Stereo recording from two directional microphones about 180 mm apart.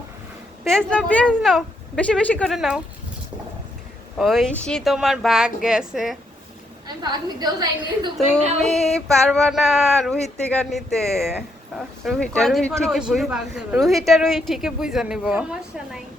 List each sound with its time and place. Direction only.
0.6 s speech: 5° left (ahead or behind)
4.2 s speech: centre (ahead or behind)
6.8 s a woman's voice: 25° right (ahead or behind)
8.6 s speech: centre (ahead or behind)